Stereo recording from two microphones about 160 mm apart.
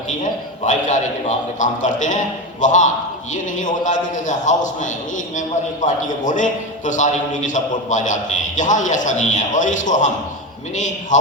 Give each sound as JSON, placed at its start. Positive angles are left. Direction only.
{"t": 0.1, "sound": "a man's voice", "side_deg": 50}